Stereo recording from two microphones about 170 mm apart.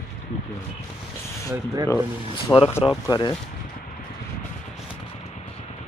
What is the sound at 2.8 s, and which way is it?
Speech, 25° left (ahead or behind).